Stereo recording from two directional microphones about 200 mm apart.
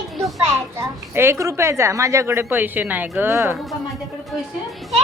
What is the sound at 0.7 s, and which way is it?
A woman's voice, 10° right (ahead or behind).